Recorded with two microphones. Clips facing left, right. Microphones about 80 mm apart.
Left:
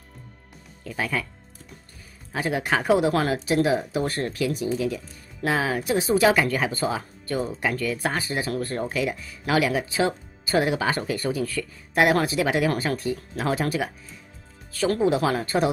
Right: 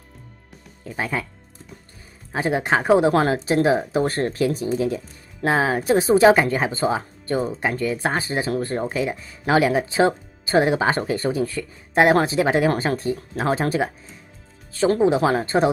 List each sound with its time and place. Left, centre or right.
0.8 s speech: right
2.3 s speech: right